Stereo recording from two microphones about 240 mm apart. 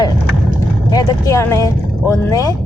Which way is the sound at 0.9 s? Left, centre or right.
Centre.